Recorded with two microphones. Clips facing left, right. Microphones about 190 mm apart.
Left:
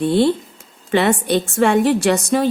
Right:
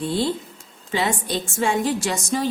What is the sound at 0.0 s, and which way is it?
A woman's voice, 65° left (ahead or behind).